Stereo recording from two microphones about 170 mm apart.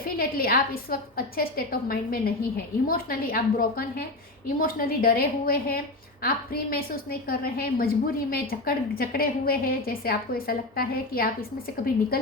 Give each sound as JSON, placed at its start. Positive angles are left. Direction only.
{"t": 0.2, "sound": "a woman's voice", "side_deg": 60}